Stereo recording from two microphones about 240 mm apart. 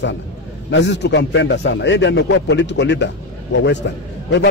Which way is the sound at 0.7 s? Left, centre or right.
Left.